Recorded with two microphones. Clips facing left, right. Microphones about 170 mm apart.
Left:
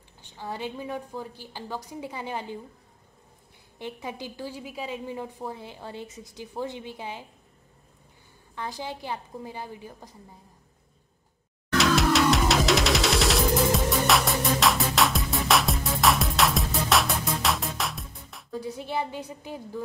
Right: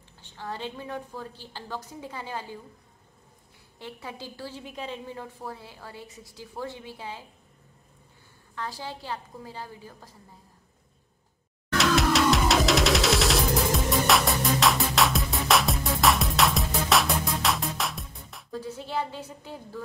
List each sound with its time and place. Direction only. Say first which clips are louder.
0.2 s a woman's voice: left 1 dB; 15° left (ahead or behind)
3.7 s a woman's voice: left 4 dB; 20° left (ahead or behind)
8.5 s a woman's voice: left 2 dB; 15° left (ahead or behind)
11.8 s music: left 1 dB; centre (ahead or behind)
18.5 s a woman's voice: left 1 dB; 15° left (ahead or behind)